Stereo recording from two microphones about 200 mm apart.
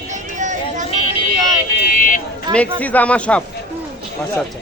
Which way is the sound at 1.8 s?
45° left (ahead or behind).